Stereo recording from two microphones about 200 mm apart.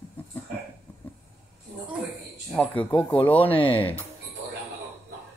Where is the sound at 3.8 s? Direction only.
10° left (ahead or behind).